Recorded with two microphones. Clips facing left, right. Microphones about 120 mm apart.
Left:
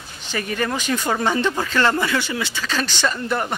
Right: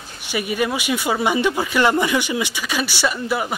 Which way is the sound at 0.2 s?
10° right (ahead or behind).